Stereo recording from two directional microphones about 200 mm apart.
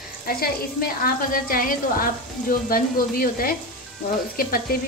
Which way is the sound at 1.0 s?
45° left (ahead or behind).